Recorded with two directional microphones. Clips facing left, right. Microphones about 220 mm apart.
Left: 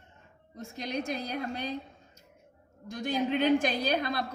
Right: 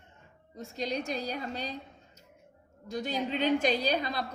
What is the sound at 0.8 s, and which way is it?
Speech, 50° left (ahead or behind).